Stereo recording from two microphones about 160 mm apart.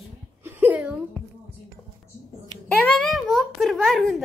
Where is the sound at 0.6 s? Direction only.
10° right (ahead or behind).